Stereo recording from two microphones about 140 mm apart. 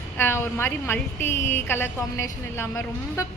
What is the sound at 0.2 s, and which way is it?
A woman's voice, 15° left (ahead or behind).